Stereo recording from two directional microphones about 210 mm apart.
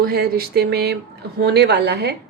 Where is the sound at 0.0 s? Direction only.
45° right (ahead or behind).